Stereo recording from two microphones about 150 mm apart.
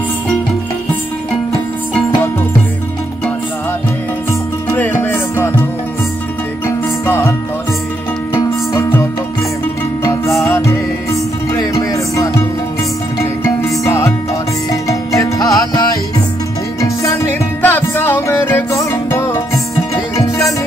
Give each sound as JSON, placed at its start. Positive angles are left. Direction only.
{"t": 4.6, "sound": "music", "side_deg": 10}
{"t": 7.1, "sound": "music", "side_deg": 15}
{"t": 10.4, "sound": "music", "side_deg": 15}
{"t": 16.8, "sound": "music", "side_deg": 20}